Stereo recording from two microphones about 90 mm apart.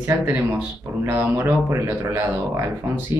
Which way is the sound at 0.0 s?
25° right (ahead or behind).